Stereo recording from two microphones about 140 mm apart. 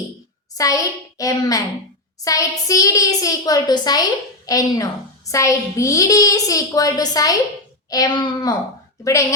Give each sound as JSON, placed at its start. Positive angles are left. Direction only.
{"t": 0.5, "sound": "a child's voice", "side_deg": 25}